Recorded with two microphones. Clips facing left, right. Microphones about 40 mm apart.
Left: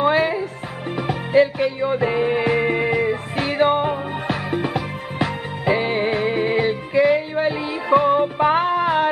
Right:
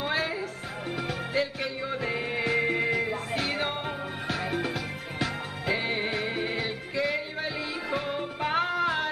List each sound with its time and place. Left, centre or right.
0.0 s music: left